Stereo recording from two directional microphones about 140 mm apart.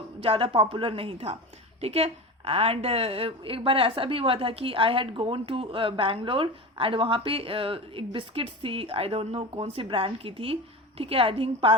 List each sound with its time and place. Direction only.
0.2 s a woman's voice: 40° right (ahead or behind)